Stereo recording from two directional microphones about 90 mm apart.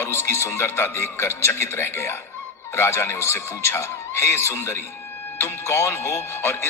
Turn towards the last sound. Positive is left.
turn(degrees=25)  # may be behind; listen again after turning